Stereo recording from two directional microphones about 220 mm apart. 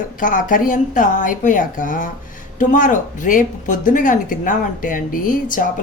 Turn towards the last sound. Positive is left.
turn(degrees=40)  # may be behind; listen again after turning